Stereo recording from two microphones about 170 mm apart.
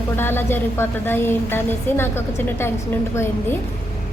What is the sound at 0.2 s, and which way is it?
A woman's voice, 15° left (ahead or behind).